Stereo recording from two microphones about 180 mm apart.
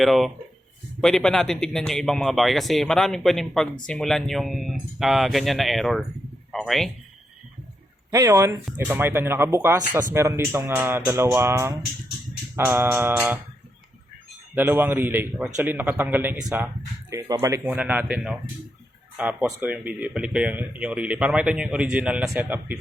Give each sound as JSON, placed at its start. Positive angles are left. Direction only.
{"t": 0.0, "sound": "a man's voice", "side_deg": 0}
{"t": 8.1, "sound": "speech", "side_deg": -15}
{"t": 14.5, "sound": "speech", "side_deg": -10}